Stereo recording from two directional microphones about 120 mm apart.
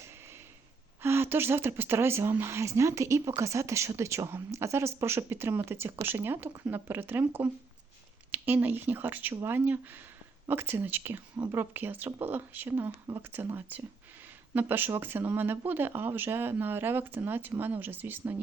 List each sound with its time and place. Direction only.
1.0 s a woman's voice: 20° right (ahead or behind)